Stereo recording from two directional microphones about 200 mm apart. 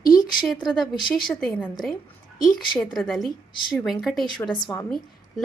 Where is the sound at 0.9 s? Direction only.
20° left (ahead or behind).